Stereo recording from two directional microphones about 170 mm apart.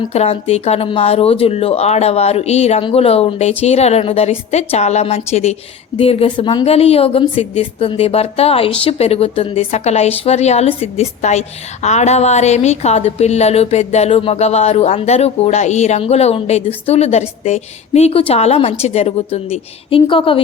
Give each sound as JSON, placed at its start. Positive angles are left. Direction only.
{"t": 0.1, "sound": "speech", "side_deg": 40}